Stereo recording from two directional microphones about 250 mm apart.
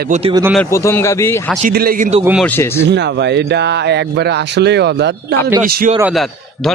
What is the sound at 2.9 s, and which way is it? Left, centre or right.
Speech, right.